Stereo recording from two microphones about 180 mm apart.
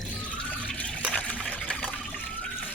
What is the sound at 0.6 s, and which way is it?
Liquid, 5° left (ahead or behind).